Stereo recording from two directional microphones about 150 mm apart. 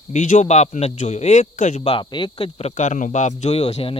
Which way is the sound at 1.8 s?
40° left (ahead or behind).